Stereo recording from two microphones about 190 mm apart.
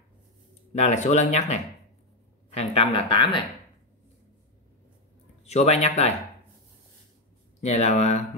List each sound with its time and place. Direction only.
0.7 s speech: 35° left (ahead or behind)
5.4 s speech: 35° left (ahead or behind)
7.6 s speech: 35° left (ahead or behind)